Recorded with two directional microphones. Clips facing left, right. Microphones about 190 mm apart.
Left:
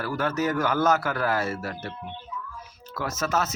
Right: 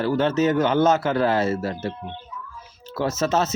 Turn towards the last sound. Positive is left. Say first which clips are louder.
# right 5 dB
turn(degrees=-25)  # may be behind; listen again after turning